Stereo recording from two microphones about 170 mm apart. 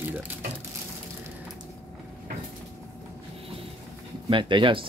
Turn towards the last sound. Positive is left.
turn(degrees=-30)  # may be behind; listen again after turning